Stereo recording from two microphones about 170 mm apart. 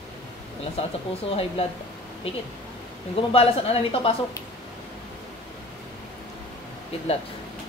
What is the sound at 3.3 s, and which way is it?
Speech, 35° left (ahead or behind).